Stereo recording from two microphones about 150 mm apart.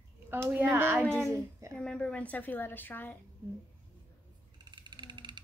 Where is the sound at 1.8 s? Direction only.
5° left (ahead or behind).